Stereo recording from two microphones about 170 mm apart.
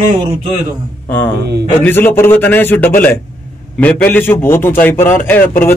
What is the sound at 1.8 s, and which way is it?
A man's voice, 10° left (ahead or behind).